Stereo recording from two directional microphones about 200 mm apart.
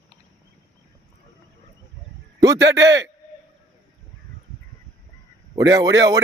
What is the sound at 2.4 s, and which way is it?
Speech, 15° right (ahead or behind).